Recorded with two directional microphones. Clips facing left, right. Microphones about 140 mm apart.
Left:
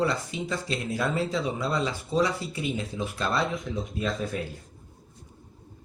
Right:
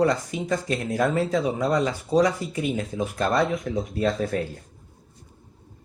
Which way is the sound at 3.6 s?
70° right (ahead or behind).